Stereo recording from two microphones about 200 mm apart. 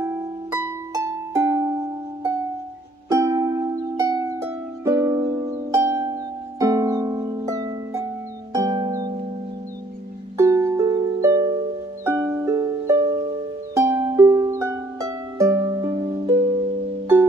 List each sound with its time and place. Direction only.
0.0 s music: 10° right (ahead or behind)
3.1 s music: 15° right (ahead or behind)
6.6 s harp: 15° right (ahead or behind)
8.5 s music: 20° right (ahead or behind)
10.3 s music: 15° right (ahead or behind)